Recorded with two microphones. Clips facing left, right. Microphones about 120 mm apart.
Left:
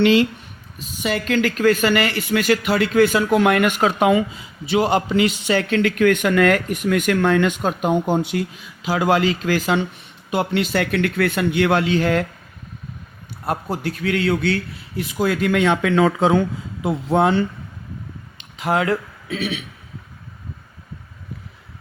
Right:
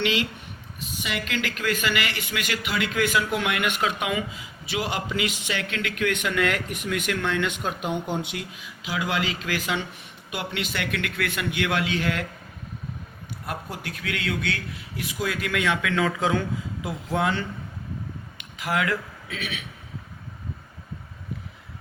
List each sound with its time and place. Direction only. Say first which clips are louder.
0.0 s a man's voice: left 11 dB; 40° left (ahead or behind)
13.4 s a man's voice: left 10 dB; 35° left (ahead or behind)
18.5 s speech: left 6 dB; 30° left (ahead or behind)